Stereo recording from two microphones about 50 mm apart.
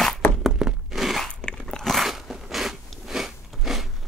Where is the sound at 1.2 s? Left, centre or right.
Centre.